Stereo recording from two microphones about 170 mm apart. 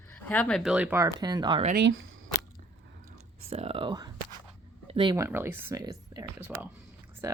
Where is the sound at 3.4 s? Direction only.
35° right (ahead or behind).